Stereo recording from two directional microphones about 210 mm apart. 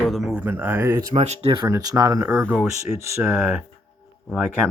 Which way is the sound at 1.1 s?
30° right (ahead or behind).